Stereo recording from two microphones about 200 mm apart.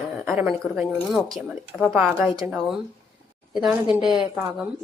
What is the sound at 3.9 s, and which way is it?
Speech, 5° right (ahead or behind).